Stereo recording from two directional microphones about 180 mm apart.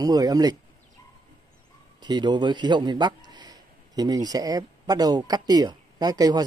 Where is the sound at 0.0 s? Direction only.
20° right (ahead or behind).